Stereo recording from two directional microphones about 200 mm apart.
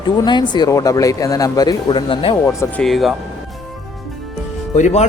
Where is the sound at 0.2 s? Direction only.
20° left (ahead or behind).